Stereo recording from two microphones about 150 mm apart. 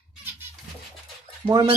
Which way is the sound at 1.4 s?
35° right (ahead or behind).